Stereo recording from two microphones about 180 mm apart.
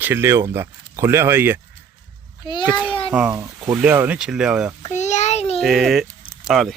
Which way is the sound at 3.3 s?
20° right (ahead or behind).